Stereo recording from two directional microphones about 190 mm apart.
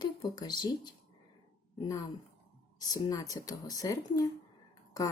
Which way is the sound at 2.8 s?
20° left (ahead or behind).